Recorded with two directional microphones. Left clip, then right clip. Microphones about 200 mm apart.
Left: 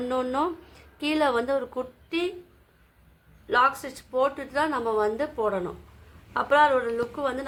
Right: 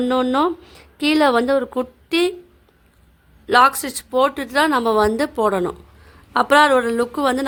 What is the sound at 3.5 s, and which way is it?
Speech, 60° right (ahead or behind).